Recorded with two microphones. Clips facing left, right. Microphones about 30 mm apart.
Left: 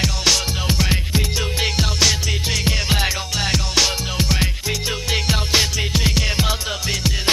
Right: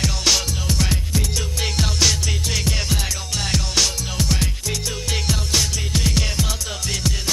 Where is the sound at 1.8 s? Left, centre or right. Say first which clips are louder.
Even; centre.